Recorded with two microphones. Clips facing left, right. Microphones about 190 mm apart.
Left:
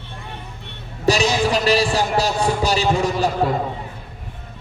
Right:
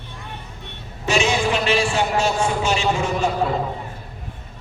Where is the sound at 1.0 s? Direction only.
35° left (ahead or behind).